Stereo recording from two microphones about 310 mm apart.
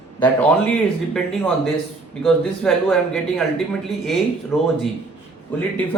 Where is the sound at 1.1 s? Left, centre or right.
Centre.